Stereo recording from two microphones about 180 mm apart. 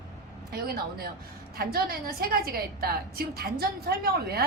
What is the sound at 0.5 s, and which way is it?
A woman's voice, 55° right (ahead or behind).